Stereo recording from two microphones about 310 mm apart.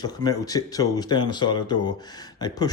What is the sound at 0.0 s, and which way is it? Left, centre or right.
Speech, centre.